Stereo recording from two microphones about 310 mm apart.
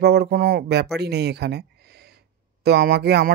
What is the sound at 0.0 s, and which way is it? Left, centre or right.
Speech, right.